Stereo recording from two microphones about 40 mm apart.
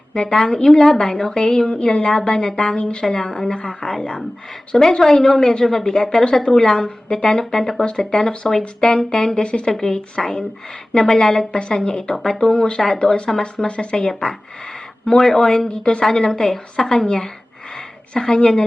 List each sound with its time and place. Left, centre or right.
0.1 s a woman's voice: left
3.0 s a woman's voice: centre
3.2 s a woman's voice: left
10.2 s a woman's voice: centre
12.5 s a woman's voice: left
12.8 s a woman's voice: centre
15.1 s a woman's voice: centre
15.6 s a woman's voice: left
17.7 s a sound: centre
18.3 s a woman's voice: left